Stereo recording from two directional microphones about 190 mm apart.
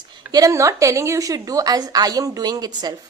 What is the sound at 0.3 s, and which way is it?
A woman's voice, 20° right (ahead or behind).